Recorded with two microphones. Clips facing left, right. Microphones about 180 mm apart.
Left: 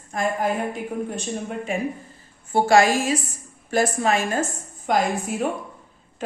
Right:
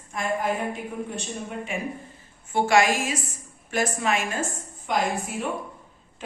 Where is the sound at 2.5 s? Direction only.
35° left (ahead or behind).